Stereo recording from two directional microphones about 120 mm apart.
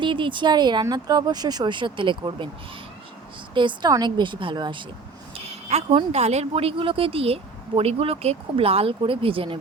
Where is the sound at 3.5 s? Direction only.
40° right (ahead or behind).